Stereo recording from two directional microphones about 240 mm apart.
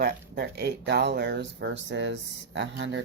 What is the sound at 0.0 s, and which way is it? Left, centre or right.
Speech, right.